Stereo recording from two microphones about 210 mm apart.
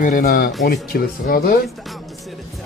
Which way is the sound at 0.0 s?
40° left (ahead or behind).